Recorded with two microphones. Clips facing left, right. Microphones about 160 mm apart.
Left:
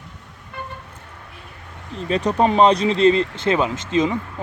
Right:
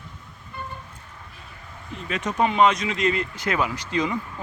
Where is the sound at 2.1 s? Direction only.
35° left (ahead or behind).